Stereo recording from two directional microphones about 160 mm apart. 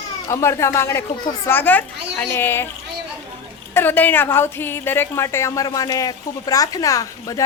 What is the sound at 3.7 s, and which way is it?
A woman's voice, 10° left (ahead or behind).